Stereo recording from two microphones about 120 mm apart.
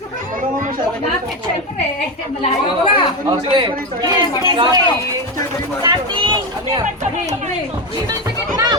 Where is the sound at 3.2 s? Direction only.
45° right (ahead or behind).